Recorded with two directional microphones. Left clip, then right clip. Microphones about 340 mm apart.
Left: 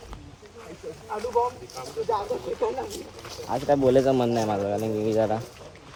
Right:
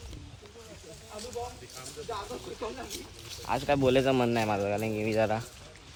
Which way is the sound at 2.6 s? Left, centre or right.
Centre.